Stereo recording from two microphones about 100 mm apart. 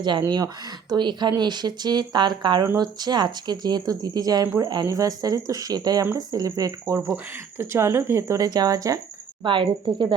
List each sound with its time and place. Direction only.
0.0 s speech: 50° right (ahead or behind)
9.4 s speech: 55° right (ahead or behind)